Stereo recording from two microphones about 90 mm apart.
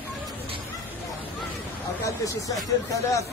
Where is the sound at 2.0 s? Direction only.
35° left (ahead or behind).